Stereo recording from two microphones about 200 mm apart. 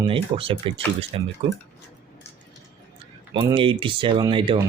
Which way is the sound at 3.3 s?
25° right (ahead or behind).